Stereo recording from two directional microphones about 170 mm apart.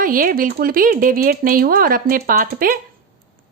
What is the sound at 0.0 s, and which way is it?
A woman's voice, 55° right (ahead or behind).